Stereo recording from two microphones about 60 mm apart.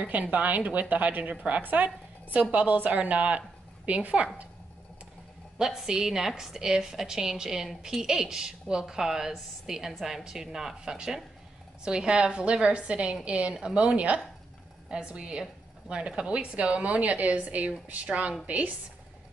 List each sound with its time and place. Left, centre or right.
0.0 s a woman's voice: right
5.6 s a woman's voice: centre